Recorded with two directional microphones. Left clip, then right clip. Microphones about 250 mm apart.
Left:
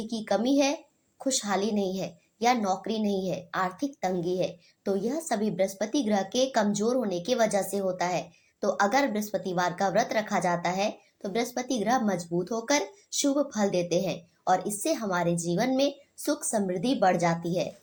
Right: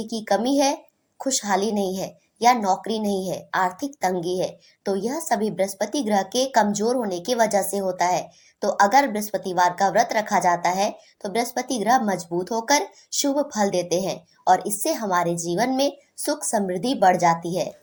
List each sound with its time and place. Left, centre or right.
0.0 s a woman's voice: centre
13.3 s a woman's voice: centre